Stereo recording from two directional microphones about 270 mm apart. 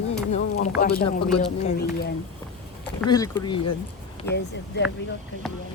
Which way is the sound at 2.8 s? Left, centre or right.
Centre.